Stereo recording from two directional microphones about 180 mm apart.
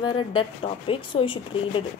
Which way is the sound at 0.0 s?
30° left (ahead or behind).